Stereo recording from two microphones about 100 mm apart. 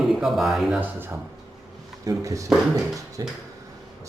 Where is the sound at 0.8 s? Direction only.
20° right (ahead or behind).